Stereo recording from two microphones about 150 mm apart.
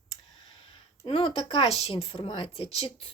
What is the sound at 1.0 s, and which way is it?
Speech, 40° left (ahead or behind).